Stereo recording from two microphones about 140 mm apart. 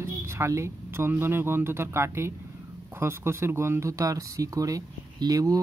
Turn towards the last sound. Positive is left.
turn(degrees=-25)  # may be behind; listen again after turning